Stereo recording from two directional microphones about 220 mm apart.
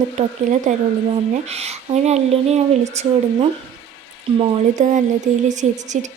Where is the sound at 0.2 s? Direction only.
35° right (ahead or behind).